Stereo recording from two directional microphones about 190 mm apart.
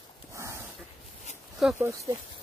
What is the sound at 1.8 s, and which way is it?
Speech, 15° right (ahead or behind).